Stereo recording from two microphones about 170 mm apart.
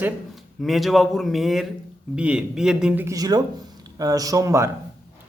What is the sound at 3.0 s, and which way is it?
A man's voice, 20° right (ahead or behind).